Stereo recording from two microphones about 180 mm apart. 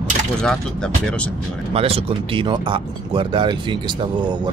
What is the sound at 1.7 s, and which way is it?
Speech, 30° right (ahead or behind).